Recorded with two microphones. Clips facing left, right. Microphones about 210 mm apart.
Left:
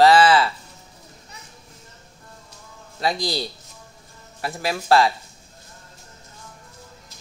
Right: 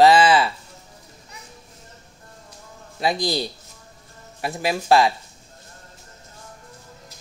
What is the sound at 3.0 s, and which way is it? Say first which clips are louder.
Speech: right 2 dB; 15° right (ahead or behind).